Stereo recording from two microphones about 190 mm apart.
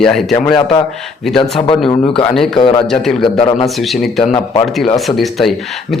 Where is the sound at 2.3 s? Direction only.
Centre (ahead or behind).